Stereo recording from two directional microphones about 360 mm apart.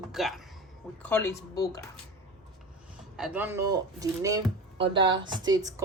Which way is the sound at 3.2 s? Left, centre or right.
Centre.